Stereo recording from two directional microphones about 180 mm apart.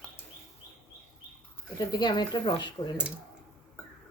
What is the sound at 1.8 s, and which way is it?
Speech, 25° left (ahead or behind).